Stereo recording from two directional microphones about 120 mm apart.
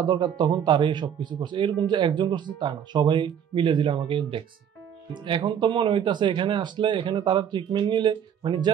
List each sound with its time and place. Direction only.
0.0 s speech: 40° right (ahead or behind)